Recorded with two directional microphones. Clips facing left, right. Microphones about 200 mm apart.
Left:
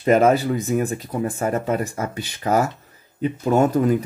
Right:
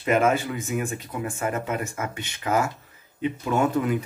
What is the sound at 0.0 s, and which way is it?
Speech, 35° left (ahead or behind).